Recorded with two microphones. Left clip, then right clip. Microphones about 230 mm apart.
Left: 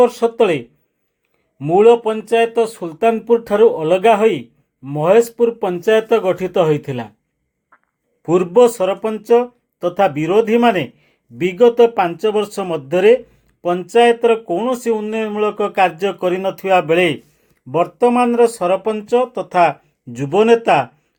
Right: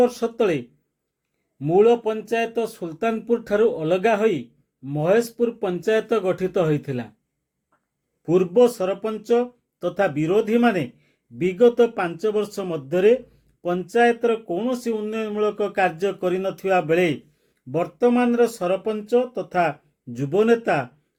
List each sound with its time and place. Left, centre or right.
0.0 s speech: centre
1.7 s speech: centre
2.8 s speech: left
3.6 s speech: centre
8.5 s speech: centre
18.3 s speech: centre